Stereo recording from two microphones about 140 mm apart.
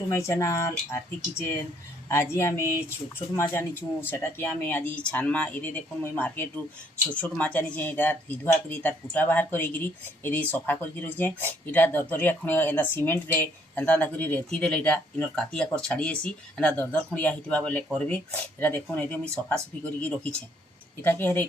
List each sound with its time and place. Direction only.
0.1 s speech: 20° left (ahead or behind)
2.0 s speech: 15° left (ahead or behind)